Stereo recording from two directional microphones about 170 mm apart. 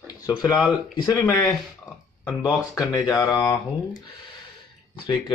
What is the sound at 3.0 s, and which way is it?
Speech, 20° left (ahead or behind).